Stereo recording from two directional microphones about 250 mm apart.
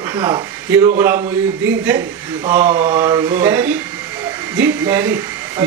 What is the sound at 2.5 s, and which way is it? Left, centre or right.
A man's voice, centre.